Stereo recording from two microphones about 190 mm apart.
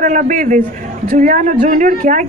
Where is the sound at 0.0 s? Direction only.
40° right (ahead or behind).